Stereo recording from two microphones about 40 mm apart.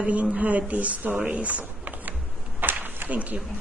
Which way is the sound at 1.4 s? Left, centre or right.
Right.